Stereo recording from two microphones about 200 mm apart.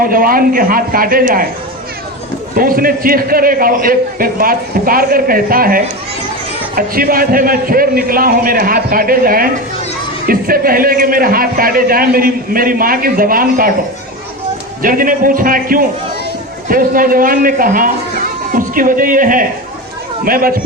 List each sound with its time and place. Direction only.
0.0 s a man's voice: 45° right (ahead or behind)
2.6 s a man's voice: 45° right (ahead or behind)
14.8 s a man's voice: 45° right (ahead or behind)